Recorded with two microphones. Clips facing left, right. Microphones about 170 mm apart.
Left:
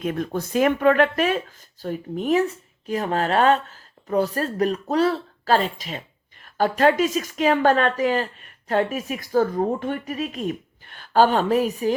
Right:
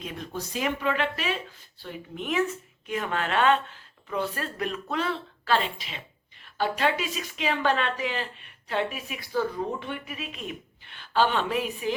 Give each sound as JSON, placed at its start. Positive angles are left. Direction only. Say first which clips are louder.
{"t": 0.0, "sound": "speech", "louder": "left 10 dB", "side_deg": 55}